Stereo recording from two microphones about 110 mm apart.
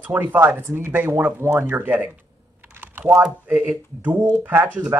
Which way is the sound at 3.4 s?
15° right (ahead or behind).